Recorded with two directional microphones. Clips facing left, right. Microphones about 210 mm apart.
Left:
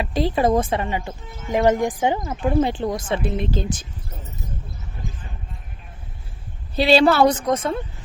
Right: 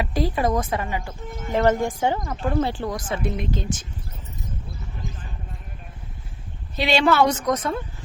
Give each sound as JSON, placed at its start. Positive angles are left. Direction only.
{"t": 0.0, "sound": "speech", "side_deg": 25}
{"t": 6.7, "sound": "a woman's voice", "side_deg": 35}